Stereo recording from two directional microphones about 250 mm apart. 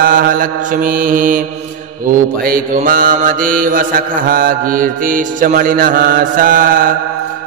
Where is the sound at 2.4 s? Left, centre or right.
Right.